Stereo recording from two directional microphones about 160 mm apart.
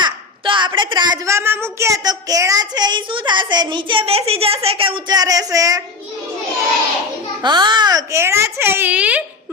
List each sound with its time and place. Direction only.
0.0 s a woman's voice: 30° right (ahead or behind)
7.4 s a child's voice: 30° right (ahead or behind); by 9.2 s 10° right (ahead or behind)